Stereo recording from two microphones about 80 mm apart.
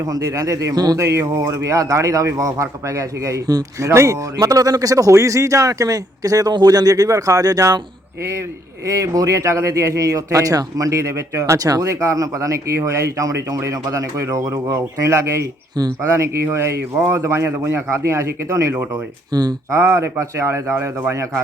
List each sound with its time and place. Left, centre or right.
0.0 s a man's voice: right
0.9 s a man's voice: right
8.9 s a man's voice: right
19.3 s speech: right
19.7 s a man's voice: right